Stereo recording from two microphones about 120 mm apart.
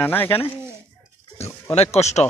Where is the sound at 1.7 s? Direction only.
65° left (ahead or behind).